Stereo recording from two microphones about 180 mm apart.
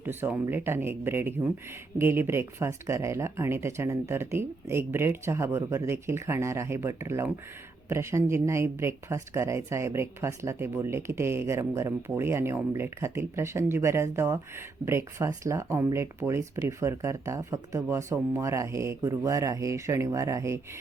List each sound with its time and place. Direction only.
0.0 s speech: 10° right (ahead or behind)